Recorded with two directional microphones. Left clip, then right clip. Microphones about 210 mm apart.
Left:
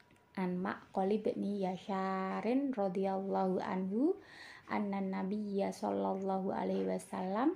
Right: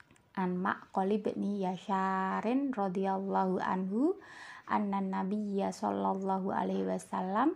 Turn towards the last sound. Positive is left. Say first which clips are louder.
# right 4 dB
turn(degrees=-25)  # may be behind; listen again after turning